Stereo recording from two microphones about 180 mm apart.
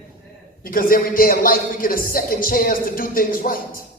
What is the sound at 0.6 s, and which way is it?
Speech, 55° left (ahead or behind).